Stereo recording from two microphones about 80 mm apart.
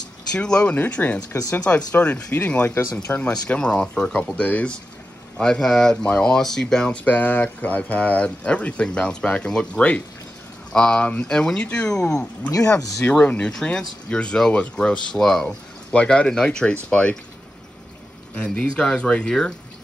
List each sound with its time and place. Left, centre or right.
0.3 s speech: centre
3.1 s speech: centre
7.1 s speech: left
13.2 s speech: centre
18.3 s speech: centre